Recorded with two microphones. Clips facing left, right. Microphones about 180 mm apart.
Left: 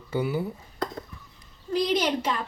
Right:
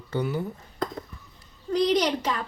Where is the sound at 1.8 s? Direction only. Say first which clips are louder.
Right 2 dB; 10° left (ahead or behind).